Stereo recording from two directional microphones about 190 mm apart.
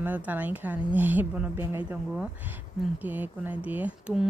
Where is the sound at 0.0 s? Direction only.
10° right (ahead or behind).